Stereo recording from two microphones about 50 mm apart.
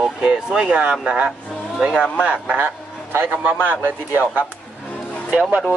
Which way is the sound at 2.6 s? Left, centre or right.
Right.